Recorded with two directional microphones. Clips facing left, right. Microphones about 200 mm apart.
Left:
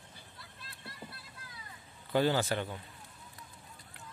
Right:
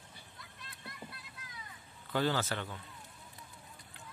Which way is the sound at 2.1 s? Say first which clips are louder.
Left 4 dB; 15° left (ahead or behind).